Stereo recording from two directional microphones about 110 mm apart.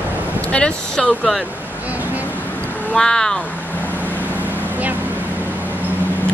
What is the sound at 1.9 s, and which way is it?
Vehicle, 15° right (ahead or behind).